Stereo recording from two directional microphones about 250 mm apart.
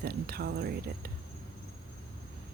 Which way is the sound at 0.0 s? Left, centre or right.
Right.